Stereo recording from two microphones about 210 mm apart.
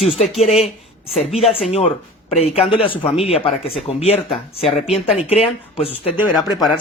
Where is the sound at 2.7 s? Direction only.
25° left (ahead or behind).